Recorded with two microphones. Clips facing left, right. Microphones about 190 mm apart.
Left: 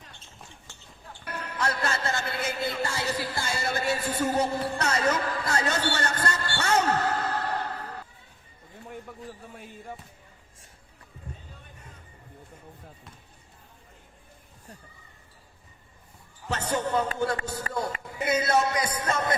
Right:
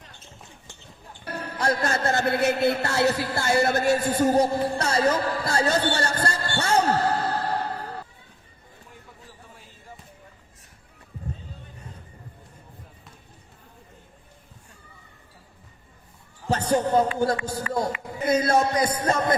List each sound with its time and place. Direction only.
1.2 s music: 30° right (ahead or behind)
1.8 s a man's voice: 55° right (ahead or behind); by 8.0 s 35° right (ahead or behind)
16.5 s basketball bounce: 40° right (ahead or behind)
17.7 s speech: 40° right (ahead or behind)